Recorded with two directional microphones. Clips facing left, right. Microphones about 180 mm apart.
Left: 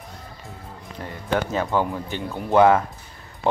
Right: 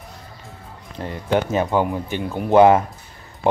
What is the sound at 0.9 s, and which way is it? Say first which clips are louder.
Speech: right 4 dB; 25° right (ahead or behind).